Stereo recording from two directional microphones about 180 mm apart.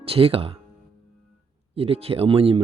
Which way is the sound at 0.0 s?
30° right (ahead or behind).